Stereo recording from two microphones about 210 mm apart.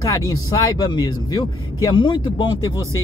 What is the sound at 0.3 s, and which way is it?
Speech, 20° left (ahead or behind).